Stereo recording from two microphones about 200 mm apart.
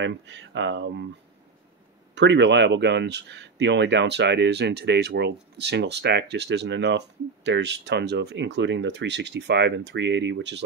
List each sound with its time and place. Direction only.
0.0 s speech: 65° right (ahead or behind)
2.1 s speech: 60° right (ahead or behind)